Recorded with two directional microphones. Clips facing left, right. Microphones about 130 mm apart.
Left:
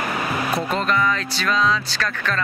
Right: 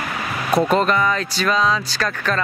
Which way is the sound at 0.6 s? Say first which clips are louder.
Right 7 dB; 50° right (ahead or behind).